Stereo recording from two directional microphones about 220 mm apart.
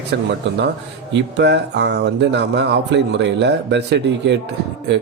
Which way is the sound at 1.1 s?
50° right (ahead or behind).